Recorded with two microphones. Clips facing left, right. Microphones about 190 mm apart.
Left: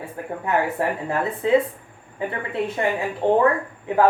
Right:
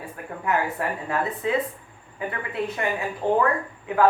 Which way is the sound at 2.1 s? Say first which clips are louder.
Left 3 dB; 30° left (ahead or behind).